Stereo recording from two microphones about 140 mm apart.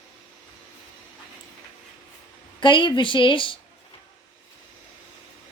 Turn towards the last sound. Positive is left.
turn(degrees=35)  # may be behind; listen again after turning